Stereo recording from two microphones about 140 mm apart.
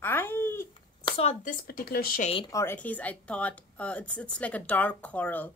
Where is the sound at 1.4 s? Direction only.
85° left.